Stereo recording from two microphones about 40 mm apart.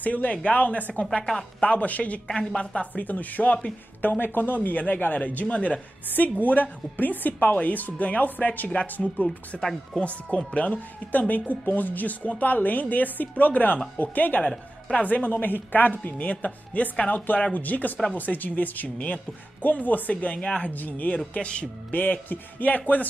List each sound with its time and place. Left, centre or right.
0.0 s speech: left
1.1 s a woman's voice: centre
1.6 s speech: left
2.2 s speech: centre
2.9 s speech: left
4.0 s speech: left
6.0 s speech: left
20.3 s speech: left
20.6 s speech: left
21.3 s speech: left
21.9 s speech: left